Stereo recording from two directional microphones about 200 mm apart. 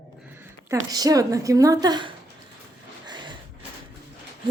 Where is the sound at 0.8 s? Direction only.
20° right (ahead or behind).